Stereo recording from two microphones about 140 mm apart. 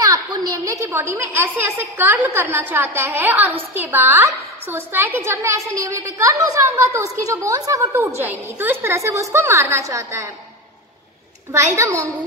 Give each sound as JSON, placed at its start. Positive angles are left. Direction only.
{"t": 0.0, "sound": "a woman's voice", "side_deg": -30}
{"t": 11.5, "sound": "a woman's voice", "side_deg": -20}